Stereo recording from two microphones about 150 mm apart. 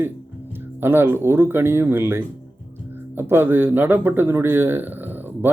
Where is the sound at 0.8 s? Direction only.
15° right (ahead or behind).